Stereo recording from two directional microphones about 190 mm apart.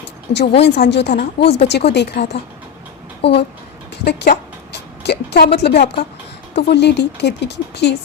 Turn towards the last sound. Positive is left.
turn(degrees=65)  # may be behind; listen again after turning